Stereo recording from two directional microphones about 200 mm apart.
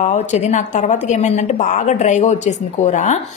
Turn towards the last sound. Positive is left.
turn(degrees=35)  # may be behind; listen again after turning